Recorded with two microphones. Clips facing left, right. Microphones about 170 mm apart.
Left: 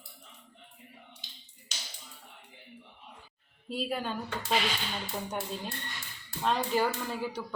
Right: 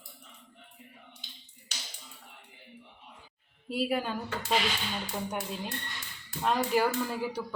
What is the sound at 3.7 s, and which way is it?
Speech, 10° right (ahead or behind).